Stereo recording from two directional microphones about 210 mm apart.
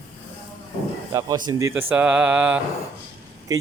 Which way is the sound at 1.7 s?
10° right (ahead or behind).